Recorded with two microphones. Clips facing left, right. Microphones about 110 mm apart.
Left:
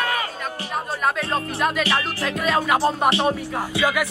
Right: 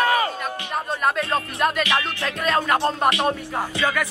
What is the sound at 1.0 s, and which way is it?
Music, centre (ahead or behind).